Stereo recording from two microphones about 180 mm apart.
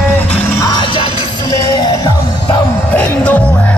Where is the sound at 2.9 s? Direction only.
5° left (ahead or behind).